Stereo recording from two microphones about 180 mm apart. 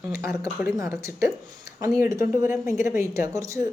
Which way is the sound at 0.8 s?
15° right (ahead or behind).